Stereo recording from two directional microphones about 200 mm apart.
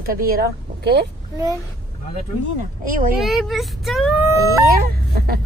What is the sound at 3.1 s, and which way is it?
Speech, centre (ahead or behind).